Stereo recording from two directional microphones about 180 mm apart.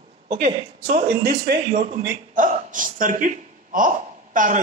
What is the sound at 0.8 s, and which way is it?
Speech, 60° right (ahead or behind).